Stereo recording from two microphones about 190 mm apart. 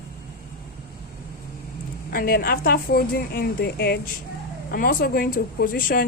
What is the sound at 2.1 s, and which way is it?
Speech, 50° left (ahead or behind).